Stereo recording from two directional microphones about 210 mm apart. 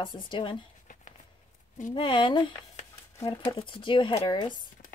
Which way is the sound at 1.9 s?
25° left (ahead or behind).